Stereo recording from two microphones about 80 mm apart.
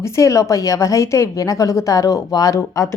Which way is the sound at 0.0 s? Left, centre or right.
Left.